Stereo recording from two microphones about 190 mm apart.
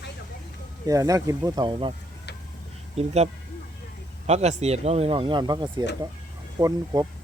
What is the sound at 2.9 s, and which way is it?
Speech, 35° right (ahead or behind).